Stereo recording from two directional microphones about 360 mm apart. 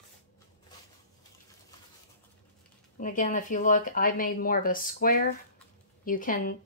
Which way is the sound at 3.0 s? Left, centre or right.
Left.